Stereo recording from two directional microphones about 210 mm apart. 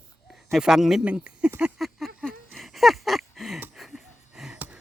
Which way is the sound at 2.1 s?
Centre (ahead or behind).